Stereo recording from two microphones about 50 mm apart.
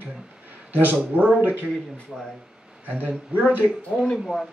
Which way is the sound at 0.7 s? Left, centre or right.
Right.